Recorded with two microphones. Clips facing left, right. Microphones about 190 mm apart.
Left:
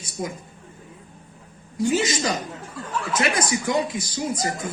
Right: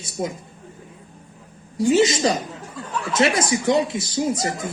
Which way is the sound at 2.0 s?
25° right (ahead or behind).